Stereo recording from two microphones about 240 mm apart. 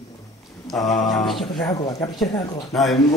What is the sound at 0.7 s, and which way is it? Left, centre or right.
Speech, centre.